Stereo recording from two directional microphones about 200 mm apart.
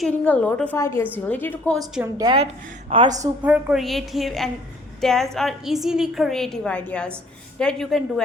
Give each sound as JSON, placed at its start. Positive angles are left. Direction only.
{"t": 0.0, "sound": "a woman's voice", "side_deg": 5}
{"t": 1.8, "sound": "a woman's voice", "side_deg": -20}
{"t": 3.4, "sound": "a woman's voice", "side_deg": -5}